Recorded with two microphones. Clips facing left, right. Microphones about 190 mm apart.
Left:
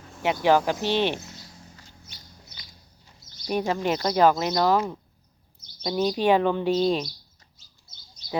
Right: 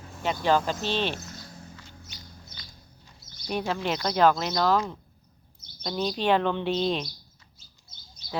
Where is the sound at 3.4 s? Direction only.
10° left (ahead or behind).